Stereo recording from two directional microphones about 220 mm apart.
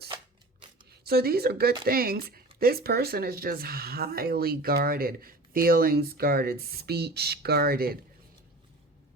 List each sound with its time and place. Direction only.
0.9 s speech: 45° right (ahead or behind)